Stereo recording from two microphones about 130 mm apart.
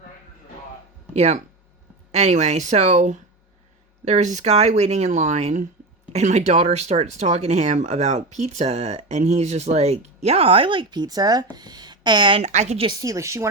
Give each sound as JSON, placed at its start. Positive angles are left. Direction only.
{"t": 1.1, "sound": "speech", "side_deg": -60}
{"t": 12.4, "sound": "speech", "side_deg": -60}
{"t": 13.0, "sound": "speech", "side_deg": -25}